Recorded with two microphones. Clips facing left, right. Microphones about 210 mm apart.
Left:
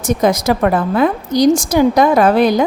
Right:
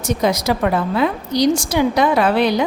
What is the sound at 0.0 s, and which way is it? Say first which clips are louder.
A woman's voice: left 4 dB; 50° left (ahead or behind).